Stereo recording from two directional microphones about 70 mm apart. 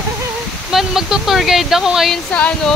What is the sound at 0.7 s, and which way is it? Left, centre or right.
Speech, centre.